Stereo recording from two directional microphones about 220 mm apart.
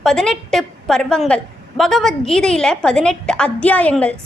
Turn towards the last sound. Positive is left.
turn(degrees=5)  # may be behind; listen again after turning